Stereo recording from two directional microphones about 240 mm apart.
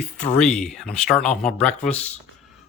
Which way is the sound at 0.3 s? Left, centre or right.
Centre.